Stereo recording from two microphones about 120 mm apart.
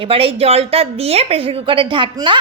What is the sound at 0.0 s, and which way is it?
A woman's voice, 50° right (ahead or behind).